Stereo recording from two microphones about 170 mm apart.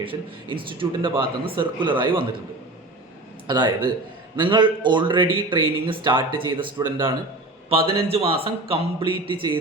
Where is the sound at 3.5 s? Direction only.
25° right (ahead or behind).